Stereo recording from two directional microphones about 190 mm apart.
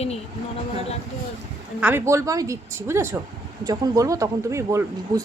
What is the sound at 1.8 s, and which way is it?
Speech, 10° right (ahead or behind).